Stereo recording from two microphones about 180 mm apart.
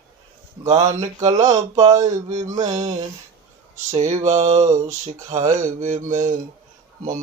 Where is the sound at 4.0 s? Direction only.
40° right (ahead or behind).